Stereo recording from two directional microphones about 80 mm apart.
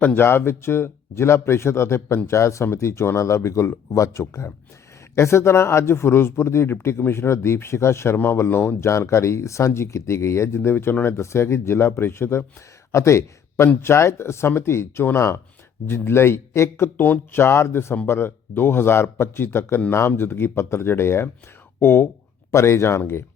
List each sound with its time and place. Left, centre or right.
0.0 s speech: left